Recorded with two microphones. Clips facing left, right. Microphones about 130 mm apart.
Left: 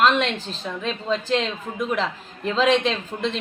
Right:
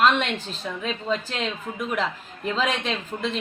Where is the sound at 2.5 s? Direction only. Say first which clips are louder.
Left 6 dB; 5° right (ahead or behind).